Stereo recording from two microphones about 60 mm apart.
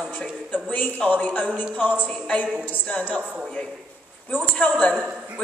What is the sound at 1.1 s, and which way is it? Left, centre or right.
A man's voice, left.